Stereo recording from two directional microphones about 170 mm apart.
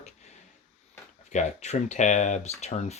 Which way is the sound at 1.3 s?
45° left (ahead or behind).